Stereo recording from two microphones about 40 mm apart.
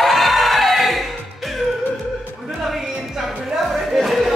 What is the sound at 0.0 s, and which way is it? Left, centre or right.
Music, centre.